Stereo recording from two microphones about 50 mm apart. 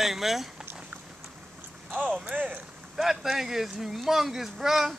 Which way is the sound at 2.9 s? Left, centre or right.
Centre.